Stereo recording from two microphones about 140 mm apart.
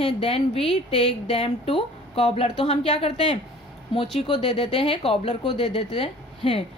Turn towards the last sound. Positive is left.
turn(degrees=45)  # may be behind; listen again after turning